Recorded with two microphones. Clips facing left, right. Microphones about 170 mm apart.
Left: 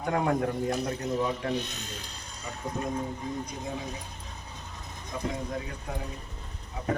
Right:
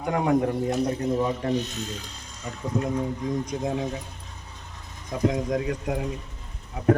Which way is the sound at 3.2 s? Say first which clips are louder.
Right 7 dB; 90° right.